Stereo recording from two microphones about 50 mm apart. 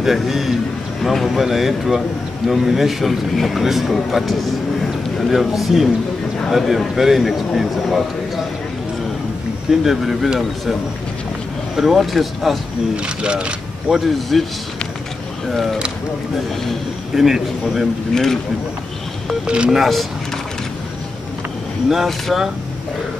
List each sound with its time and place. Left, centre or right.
0.0 s a man's voice: centre
9.7 s a man's voice: centre
11.7 s a man's voice: centre
12.9 s speech: right
13.9 s a man's voice: centre
15.5 s a man's voice: centre
17.1 s a man's voice: centre
18.1 s speech: centre
19.4 s speech: centre
19.7 s a man's voice: centre
21.8 s speech: centre